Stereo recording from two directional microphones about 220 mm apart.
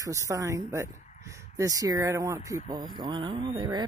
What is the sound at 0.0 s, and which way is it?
Speech, 15° right (ahead or behind).